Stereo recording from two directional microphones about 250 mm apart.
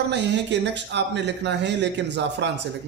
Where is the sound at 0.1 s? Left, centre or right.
Right.